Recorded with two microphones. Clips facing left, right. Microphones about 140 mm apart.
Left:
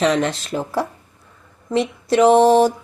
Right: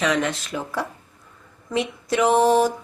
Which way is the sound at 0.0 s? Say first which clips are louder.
Left 4 dB; 30° left (ahead or behind).